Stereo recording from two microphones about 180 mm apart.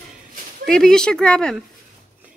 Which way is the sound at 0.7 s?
5° left (ahead or behind).